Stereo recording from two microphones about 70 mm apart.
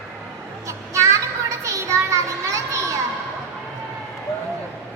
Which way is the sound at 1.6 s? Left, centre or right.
Right.